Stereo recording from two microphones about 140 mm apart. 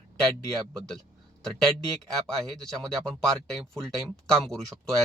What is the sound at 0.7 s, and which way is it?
Speech, 5° left (ahead or behind).